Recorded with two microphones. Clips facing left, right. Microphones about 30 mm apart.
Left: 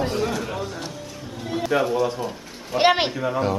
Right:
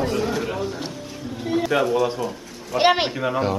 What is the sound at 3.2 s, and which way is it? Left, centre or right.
Speech, centre.